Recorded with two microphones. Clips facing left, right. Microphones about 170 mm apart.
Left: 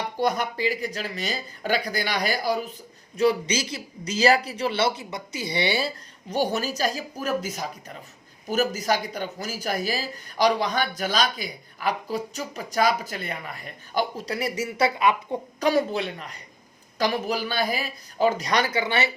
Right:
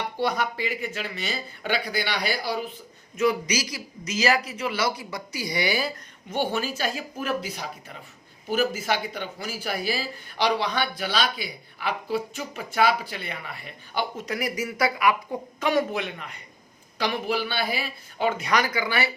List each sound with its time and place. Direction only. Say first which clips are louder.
0.2 s speech: left 2 dB; 45° left (ahead or behind)
3.2 s speech: left 2 dB; 30° left (ahead or behind)
6.3 s speech: left 2 dB; 40° left (ahead or behind); by 19.1 s 25° left (ahead or behind)